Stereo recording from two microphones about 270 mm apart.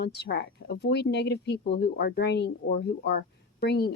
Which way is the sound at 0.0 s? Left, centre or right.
Left.